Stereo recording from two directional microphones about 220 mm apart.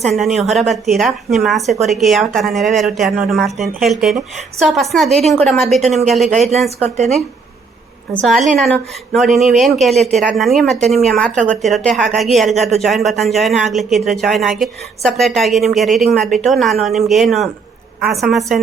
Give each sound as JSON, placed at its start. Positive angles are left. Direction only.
{"t": 0.0, "sound": "speech", "side_deg": 0}
{"t": 6.2, "sound": "a woman's voice", "side_deg": -30}
{"t": 8.1, "sound": "speech", "side_deg": 0}